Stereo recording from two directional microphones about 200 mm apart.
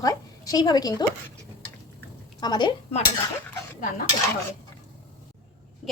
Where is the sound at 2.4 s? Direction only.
20° left (ahead or behind).